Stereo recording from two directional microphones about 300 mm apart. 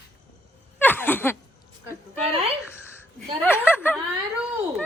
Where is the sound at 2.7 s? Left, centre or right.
Centre.